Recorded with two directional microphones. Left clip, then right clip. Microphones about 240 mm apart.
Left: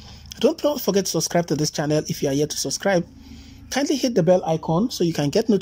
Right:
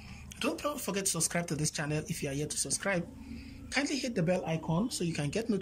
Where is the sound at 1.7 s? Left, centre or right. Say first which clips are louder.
Left 13 dB; left.